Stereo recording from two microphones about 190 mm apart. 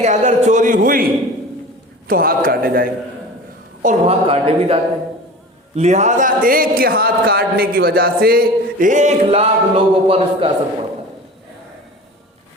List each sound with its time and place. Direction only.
0.0 s a man's voice: 40° right (ahead or behind)
2.0 s a man's voice: 50° right (ahead or behind)
3.8 s a man's voice: 35° right (ahead or behind)